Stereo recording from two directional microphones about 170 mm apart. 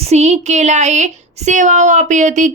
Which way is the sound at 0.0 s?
40° right (ahead or behind).